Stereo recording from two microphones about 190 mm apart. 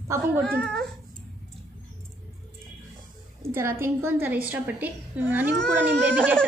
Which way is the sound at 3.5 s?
15° right (ahead or behind).